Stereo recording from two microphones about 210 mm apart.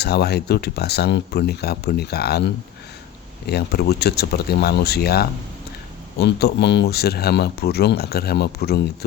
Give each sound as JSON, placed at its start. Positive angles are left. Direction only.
{"t": 0.0, "sound": "speech", "side_deg": 50}